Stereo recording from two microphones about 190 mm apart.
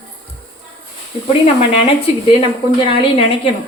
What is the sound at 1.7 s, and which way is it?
A woman's voice, 30° left (ahead or behind).